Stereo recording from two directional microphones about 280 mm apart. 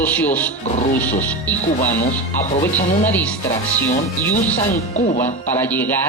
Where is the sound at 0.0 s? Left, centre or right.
Centre.